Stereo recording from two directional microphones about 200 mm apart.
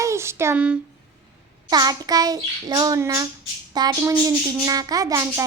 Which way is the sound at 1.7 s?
20° right (ahead or behind).